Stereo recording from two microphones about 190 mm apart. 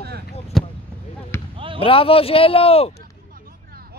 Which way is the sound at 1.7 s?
30° left (ahead or behind).